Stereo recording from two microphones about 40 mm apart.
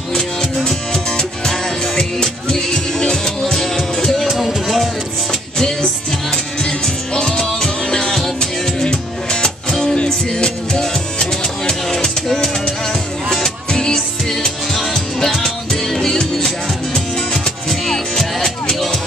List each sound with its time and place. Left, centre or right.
0.9 s music: centre
5.6 s music: centre
13.9 s music: centre